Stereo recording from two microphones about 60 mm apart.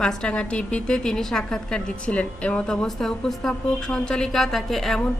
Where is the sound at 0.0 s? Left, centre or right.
Centre.